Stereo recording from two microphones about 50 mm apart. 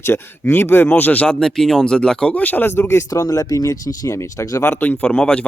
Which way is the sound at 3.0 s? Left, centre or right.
Left.